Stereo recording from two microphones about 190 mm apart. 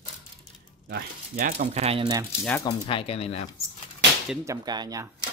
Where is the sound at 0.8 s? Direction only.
55° right (ahead or behind).